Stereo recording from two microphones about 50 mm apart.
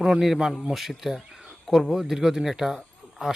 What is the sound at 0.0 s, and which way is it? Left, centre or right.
A man's voice, centre.